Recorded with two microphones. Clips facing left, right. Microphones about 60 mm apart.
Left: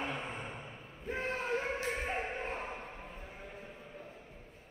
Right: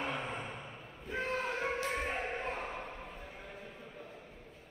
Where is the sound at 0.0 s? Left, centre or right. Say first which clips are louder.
Right 1 dB; right.